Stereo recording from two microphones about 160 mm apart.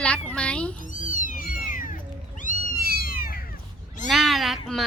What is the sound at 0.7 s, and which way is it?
Cat, 55° left (ahead or behind).